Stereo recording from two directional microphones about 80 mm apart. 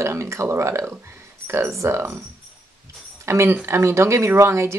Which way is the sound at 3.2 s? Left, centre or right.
Right.